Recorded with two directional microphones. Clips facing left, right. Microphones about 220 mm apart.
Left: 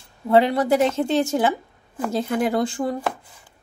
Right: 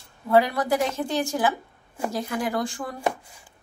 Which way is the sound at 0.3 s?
25° left (ahead or behind).